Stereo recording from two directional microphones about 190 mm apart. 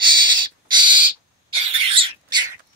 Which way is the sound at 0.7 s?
25° right (ahead or behind).